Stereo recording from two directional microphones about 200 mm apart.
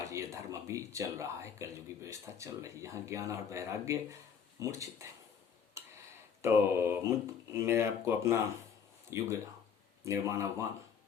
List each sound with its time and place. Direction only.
0.0 s speech: 15° right (ahead or behind)
6.4 s speech: 10° right (ahead or behind)